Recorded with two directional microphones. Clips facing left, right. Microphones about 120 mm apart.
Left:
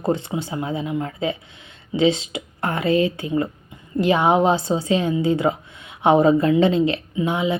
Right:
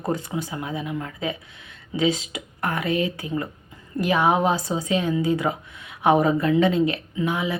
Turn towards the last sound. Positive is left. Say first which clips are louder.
# left 3 dB
turn(degrees=25)  # may be behind; listen again after turning